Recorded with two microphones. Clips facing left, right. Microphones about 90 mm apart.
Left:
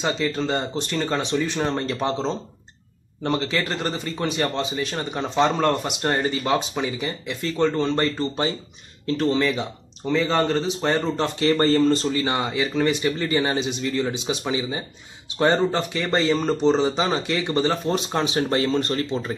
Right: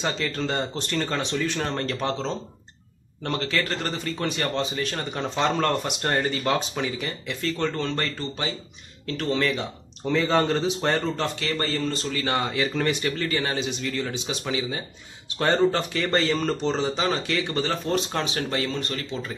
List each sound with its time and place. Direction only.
0.0 s speech: 5° left (ahead or behind); by 9.3 s 30° left (ahead or behind)
10.0 s speech: centre (ahead or behind)
11.3 s speech: 30° left (ahead or behind)
12.1 s speech: 20° left (ahead or behind)
13.2 s speech: 20° left (ahead or behind)
18.3 s speech: 30° left (ahead or behind)